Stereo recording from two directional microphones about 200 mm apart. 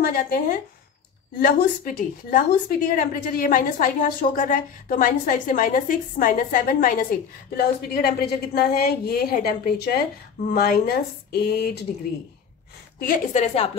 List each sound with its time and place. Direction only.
0.0 s a woman's voice: 45° left (ahead or behind)
13.0 s a woman's voice: 40° left (ahead or behind)